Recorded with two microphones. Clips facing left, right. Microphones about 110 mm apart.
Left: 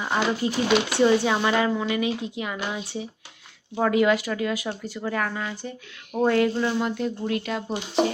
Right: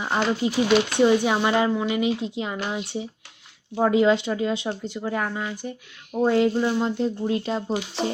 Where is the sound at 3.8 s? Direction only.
20° right (ahead or behind).